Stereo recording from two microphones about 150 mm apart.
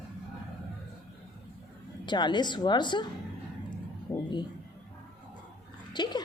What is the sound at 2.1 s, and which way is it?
A woman's voice, 30° left (ahead or behind).